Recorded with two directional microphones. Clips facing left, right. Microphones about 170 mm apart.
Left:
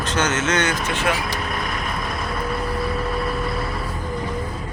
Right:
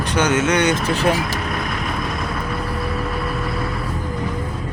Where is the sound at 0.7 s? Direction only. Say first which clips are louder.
Right 4 dB; 35° right (ahead or behind).